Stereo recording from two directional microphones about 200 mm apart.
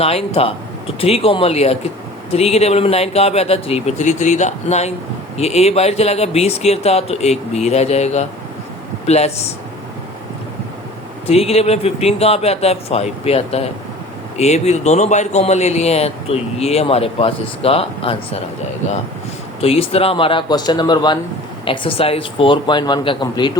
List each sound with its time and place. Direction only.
0.0 s a man's voice: 30° left (ahead or behind)
11.3 s a man's voice: 30° left (ahead or behind)
19.6 s speech: 30° left (ahead or behind)